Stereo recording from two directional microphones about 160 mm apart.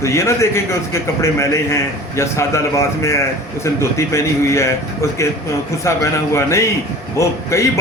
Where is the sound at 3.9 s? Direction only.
20° left (ahead or behind).